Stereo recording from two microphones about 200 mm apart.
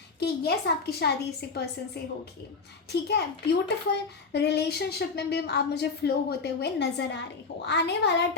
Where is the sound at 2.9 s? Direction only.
55° left (ahead or behind).